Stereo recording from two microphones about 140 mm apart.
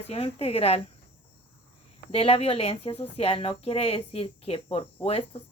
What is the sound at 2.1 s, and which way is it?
A woman's voice, 45° left (ahead or behind).